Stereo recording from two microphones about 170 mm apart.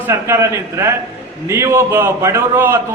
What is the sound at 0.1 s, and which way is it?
A man's voice, 15° right (ahead or behind).